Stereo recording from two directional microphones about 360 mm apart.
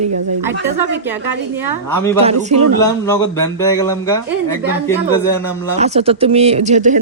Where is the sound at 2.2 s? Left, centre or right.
Centre.